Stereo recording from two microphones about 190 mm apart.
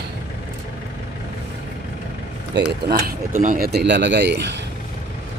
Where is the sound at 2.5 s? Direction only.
60° right (ahead or behind).